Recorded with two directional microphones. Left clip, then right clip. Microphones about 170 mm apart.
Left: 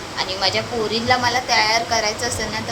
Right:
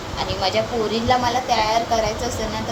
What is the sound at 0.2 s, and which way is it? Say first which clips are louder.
A woman's voice: even; 10° right (ahead or behind).